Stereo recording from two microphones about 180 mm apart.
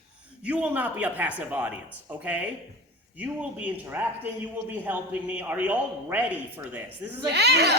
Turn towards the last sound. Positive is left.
turn(degrees=-70)  # may be behind; listen again after turning